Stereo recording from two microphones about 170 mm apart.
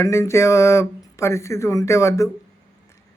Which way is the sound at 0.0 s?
15° left (ahead or behind).